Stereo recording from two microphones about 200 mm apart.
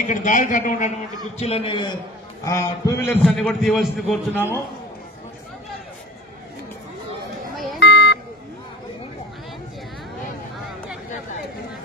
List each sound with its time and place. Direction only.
0.0 s a man's voice: 40° left (ahead or behind)
1.4 s a man's voice: 30° left (ahead or behind)
3.1 s a man's voice: 5° left (ahead or behind)
7.5 s a sound: centre (ahead or behind)
7.8 s vehicle: 60° left (ahead or behind)